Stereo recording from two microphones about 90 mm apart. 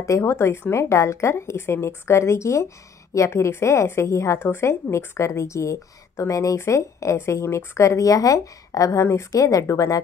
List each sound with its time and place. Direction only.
0.0 s a woman's voice: 35° left (ahead or behind)